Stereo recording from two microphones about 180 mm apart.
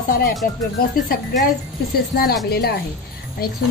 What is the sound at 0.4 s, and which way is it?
Speech, 55° left (ahead or behind).